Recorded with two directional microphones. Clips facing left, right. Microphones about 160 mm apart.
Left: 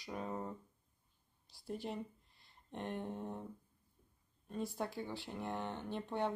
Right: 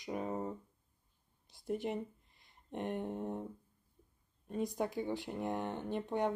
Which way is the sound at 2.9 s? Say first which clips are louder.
Right 3 dB; 5° right (ahead or behind).